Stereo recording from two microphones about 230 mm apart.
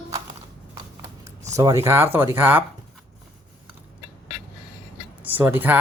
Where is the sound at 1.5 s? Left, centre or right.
Centre.